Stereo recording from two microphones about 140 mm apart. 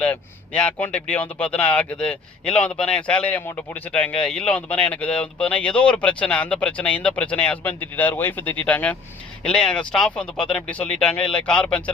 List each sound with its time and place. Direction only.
0.0 s speech: 5° left (ahead or behind)